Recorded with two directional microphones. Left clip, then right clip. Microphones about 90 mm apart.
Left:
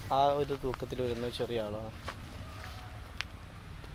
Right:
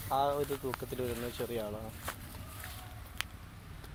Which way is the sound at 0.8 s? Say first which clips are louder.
Left 3 dB; 50° left (ahead or behind).